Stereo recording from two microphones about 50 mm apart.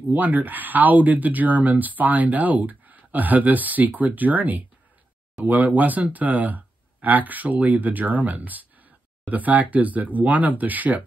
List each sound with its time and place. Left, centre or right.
0.1 s speech: right